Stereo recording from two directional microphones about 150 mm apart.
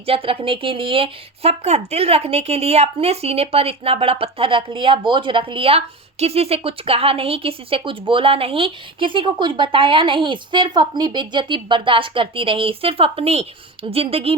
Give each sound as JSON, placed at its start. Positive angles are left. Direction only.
{"t": 0.0, "sound": "speech", "side_deg": -40}